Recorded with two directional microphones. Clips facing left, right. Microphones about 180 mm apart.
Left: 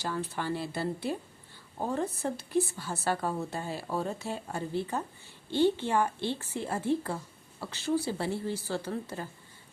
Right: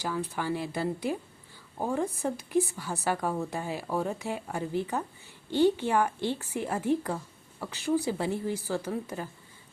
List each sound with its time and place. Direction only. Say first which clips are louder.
0.0 s speech: right 2 dB; 10° right (ahead or behind)